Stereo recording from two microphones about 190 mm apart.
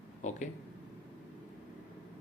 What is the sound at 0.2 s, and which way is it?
Speech, 40° left (ahead or behind).